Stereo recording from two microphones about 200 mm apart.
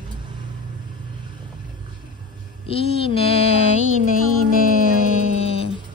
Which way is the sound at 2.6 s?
30° left (ahead or behind).